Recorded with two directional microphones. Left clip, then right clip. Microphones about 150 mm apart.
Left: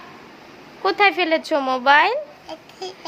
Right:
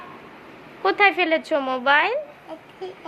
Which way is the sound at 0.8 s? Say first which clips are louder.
Left 1 dB; 20° left (ahead or behind).